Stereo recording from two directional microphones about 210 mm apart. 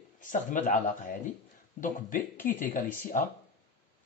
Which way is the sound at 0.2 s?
40° left (ahead or behind).